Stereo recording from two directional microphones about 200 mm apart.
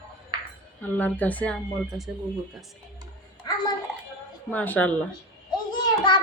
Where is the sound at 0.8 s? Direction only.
10° left (ahead or behind).